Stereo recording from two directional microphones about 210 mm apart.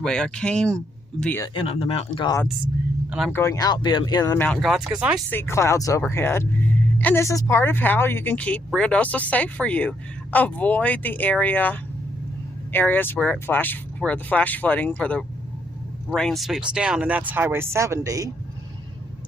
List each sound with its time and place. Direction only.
0.0 s speech: 5° left (ahead or behind)
1.5 s speech: 25° left (ahead or behind)
3.1 s speech: centre (ahead or behind)
3.3 s speech: 15° left (ahead or behind)
4.4 s speech: centre (ahead or behind)
5.3 s speech: 10° left (ahead or behind); by 18.3 s 15° right (ahead or behind)